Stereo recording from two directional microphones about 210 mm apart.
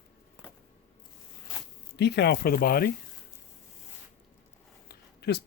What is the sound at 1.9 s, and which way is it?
Speech, 55° left (ahead or behind).